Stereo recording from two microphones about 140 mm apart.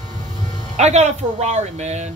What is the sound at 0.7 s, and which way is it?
Speech, 55° right (ahead or behind).